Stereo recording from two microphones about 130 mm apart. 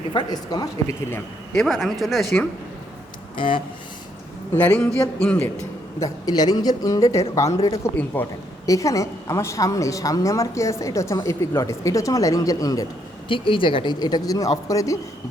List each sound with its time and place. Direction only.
0.1 s a woman's voice: 35° left (ahead or behind)
1.5 s speech: centre (ahead or behind)
3.3 s speech: 40° left (ahead or behind)
4.5 s a man's voice: 10° left (ahead or behind)
6.0 s a woman's voice: 30° left (ahead or behind)
8.6 s a woman's voice: 25° left (ahead or behind)
13.2 s speech: 40° left (ahead or behind); by 14.9 s 25° left (ahead or behind)